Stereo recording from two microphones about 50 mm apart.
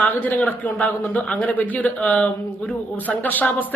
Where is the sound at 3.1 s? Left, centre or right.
Left.